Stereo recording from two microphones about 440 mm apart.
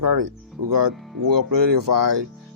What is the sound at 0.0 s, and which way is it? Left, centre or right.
Speech, right.